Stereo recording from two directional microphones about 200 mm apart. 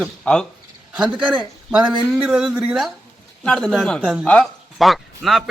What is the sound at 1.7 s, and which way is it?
Speech, 5° right (ahead or behind).